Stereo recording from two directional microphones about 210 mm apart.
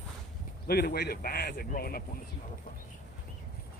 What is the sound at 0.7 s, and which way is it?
Speech, 50° left (ahead or behind).